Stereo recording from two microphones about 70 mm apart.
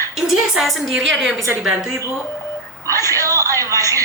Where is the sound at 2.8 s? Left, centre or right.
Right.